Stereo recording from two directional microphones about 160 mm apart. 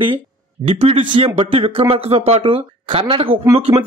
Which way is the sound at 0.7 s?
35° right (ahead or behind).